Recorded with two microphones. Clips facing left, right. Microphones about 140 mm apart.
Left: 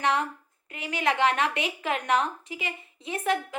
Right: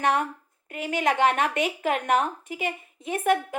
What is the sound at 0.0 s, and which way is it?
A woman's voice, 50° right (ahead or behind).